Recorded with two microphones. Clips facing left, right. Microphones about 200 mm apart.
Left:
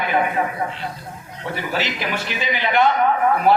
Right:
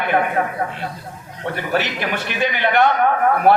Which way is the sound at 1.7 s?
55° right (ahead or behind).